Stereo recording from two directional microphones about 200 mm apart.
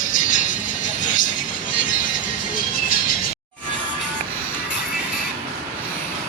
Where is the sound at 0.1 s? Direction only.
40° left (ahead or behind).